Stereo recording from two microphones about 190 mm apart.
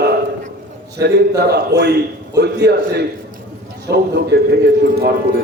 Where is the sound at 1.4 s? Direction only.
60° right (ahead or behind).